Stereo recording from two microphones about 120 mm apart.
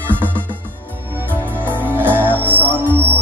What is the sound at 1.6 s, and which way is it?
Music, 15° right (ahead or behind).